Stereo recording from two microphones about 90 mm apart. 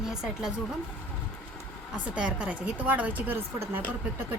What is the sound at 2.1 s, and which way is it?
A woman's voice, 10° right (ahead or behind).